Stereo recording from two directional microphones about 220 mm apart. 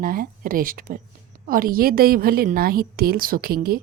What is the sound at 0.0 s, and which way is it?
A woman's voice, 40° right (ahead or behind).